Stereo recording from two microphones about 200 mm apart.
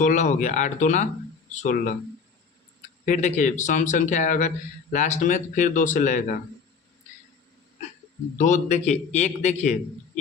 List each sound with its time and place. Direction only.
0.0 s speech: 40° left (ahead or behind)
3.1 s speech: 35° left (ahead or behind)
8.4 s speech: 35° left (ahead or behind)